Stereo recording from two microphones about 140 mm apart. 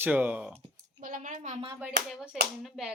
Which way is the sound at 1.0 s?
70° right (ahead or behind).